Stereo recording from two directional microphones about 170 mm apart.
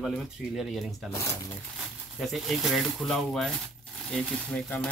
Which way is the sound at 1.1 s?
15° left (ahead or behind).